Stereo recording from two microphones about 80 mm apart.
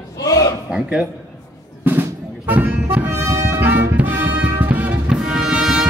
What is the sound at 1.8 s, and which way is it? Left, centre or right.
Music, right.